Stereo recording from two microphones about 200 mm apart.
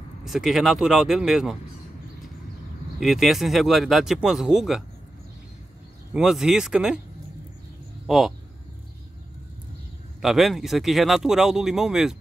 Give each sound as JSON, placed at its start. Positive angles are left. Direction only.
{"t": 0.2, "sound": "speech", "side_deg": 0}
{"t": 3.0, "sound": "speech", "side_deg": 0}
{"t": 6.1, "sound": "speech", "side_deg": -5}
{"t": 10.2, "sound": "speech", "side_deg": 0}